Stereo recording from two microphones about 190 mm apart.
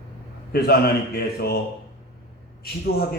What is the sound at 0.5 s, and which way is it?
A man's voice, 55° left (ahead or behind).